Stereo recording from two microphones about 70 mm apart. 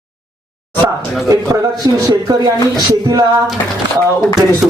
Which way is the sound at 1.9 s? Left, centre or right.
Right.